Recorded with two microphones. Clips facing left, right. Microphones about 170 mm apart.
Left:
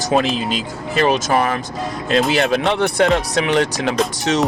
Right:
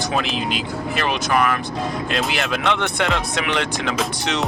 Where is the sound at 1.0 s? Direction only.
35° left (ahead or behind).